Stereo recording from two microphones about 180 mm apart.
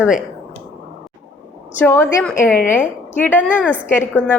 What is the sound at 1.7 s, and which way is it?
A woman's voice, 10° left (ahead or behind).